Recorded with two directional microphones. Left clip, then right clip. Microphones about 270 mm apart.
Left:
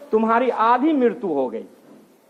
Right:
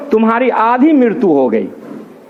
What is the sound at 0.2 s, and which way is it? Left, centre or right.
A man's voice, right.